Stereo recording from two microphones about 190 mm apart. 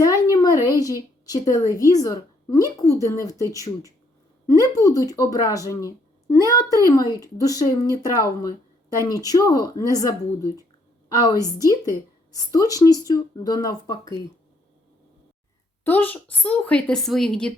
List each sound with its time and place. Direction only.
0.0 s a sound: 15° left (ahead or behind)
1.7 s speech: 20° left (ahead or behind)
15.8 s a woman's voice: 10° left (ahead or behind)